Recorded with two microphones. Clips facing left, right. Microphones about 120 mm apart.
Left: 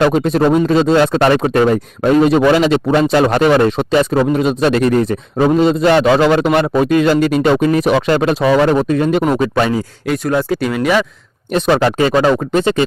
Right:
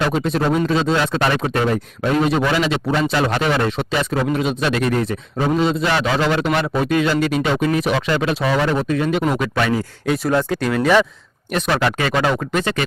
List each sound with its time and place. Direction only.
0.0 s speech: 50° left (ahead or behind)
9.3 s speech: 30° left (ahead or behind)
10.3 s speech: 5° left (ahead or behind)
11.5 s speech: 35° left (ahead or behind)